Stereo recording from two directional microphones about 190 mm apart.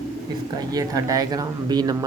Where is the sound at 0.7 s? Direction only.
20° right (ahead or behind).